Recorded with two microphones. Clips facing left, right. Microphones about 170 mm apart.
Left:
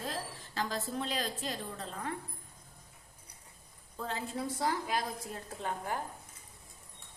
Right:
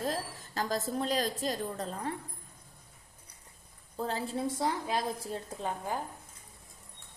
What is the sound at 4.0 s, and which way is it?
A woman's voice, 35° right (ahead or behind).